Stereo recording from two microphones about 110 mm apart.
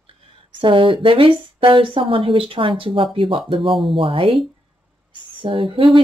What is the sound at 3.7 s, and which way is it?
Speech, centre (ahead or behind).